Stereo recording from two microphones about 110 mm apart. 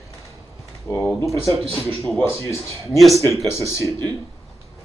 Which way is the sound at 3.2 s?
25° left (ahead or behind).